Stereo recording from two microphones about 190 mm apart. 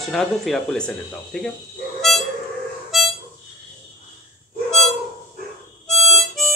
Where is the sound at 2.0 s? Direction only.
Centre (ahead or behind).